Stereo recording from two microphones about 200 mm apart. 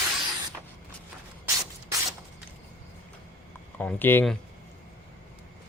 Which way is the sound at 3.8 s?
10° left (ahead or behind).